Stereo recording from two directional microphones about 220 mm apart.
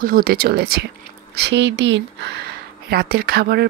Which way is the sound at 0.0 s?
40° right (ahead or behind).